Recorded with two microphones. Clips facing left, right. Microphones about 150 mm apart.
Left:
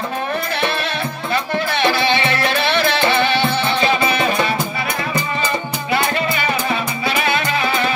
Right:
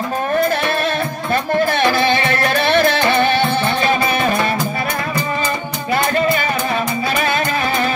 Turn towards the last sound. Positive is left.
turn(degrees=-45)  # may be behind; listen again after turning